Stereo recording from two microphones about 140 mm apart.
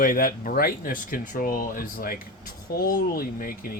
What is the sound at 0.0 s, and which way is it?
Speech, 80° left.